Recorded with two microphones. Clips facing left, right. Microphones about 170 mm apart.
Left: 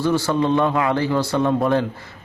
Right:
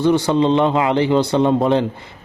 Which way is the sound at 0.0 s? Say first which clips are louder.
Right 4 dB; 20° right (ahead or behind).